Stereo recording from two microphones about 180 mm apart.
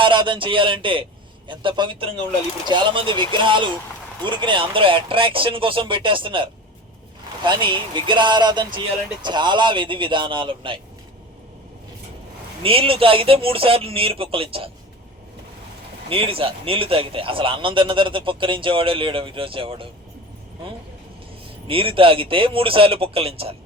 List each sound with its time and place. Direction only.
0.0 s speech: 25° right (ahead or behind)
12.6 s speech: 30° right (ahead or behind)
16.0 s speech: 30° right (ahead or behind)
21.7 s speech: 30° right (ahead or behind)